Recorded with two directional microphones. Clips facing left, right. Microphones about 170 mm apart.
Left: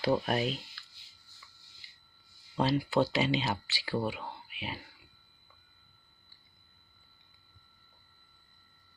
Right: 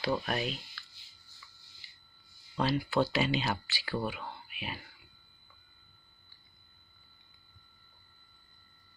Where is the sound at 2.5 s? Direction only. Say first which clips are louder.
Left 2 dB; 35° left (ahead or behind).